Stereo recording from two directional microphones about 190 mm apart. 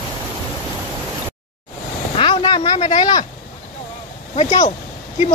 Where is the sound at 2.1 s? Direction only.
30° left (ahead or behind).